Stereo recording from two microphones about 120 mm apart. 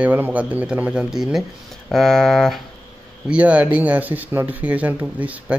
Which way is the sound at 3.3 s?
10° right (ahead or behind).